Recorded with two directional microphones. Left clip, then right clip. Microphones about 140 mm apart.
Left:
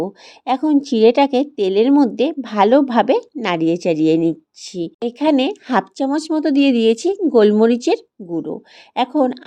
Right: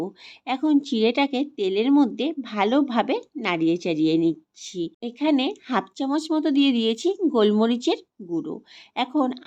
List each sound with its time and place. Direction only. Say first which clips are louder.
0.4 s speech: left 6 dB; 35° left (ahead or behind)